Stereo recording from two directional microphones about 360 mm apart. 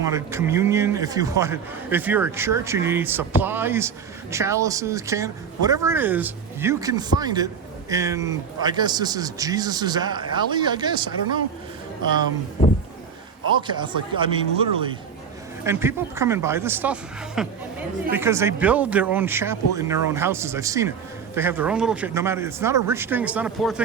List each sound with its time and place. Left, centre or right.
0.0 s speech: centre
13.6 s speech: centre